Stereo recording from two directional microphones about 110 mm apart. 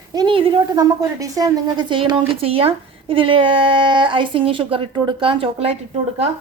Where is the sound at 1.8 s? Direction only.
45° right (ahead or behind).